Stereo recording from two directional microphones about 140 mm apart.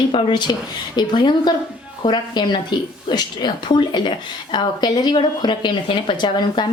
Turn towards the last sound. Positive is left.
turn(degrees=35)  # may be behind; listen again after turning